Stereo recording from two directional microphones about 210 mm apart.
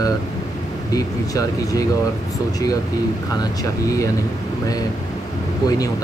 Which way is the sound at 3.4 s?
15° left (ahead or behind).